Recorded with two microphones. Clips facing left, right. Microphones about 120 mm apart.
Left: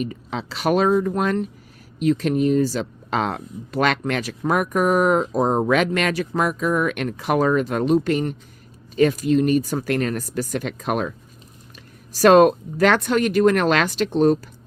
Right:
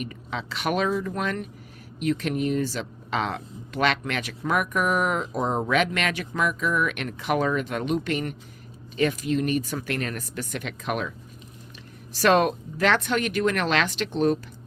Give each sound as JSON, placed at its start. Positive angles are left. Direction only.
{"t": 0.0, "sound": "speech", "side_deg": 35}
{"t": 12.1, "sound": "speech", "side_deg": 40}